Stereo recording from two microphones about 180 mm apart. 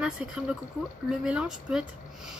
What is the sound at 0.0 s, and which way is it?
Speech, 5° right (ahead or behind).